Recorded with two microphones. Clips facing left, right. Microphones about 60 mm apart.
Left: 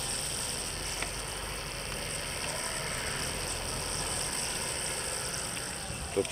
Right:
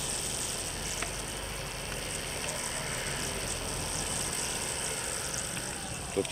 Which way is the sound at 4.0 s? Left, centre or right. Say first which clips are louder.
Even; left.